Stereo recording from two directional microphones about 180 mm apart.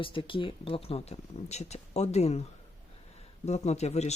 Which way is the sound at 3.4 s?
35° left (ahead or behind).